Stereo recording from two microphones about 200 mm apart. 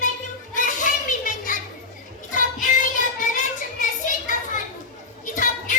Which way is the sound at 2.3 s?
40° left (ahead or behind).